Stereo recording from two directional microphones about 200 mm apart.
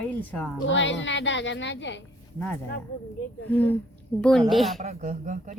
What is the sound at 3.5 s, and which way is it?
Speech, 10° left (ahead or behind).